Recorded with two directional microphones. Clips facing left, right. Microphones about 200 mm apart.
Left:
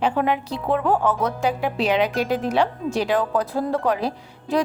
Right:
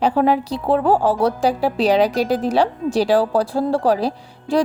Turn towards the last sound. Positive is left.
turn(degrees=-35)  # may be behind; listen again after turning